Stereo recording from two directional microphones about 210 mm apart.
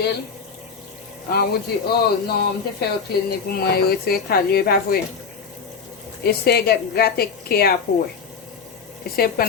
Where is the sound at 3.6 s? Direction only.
45° left (ahead or behind).